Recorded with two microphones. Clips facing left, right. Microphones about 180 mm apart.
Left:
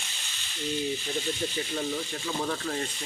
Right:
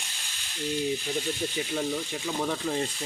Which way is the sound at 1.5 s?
10° right (ahead or behind).